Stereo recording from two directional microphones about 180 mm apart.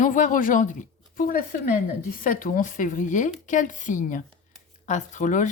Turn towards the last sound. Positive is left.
turn(degrees=45)  # may be behind; listen again after turning